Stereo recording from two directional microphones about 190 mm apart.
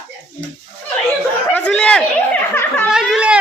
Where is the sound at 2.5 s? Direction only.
10° left (ahead or behind).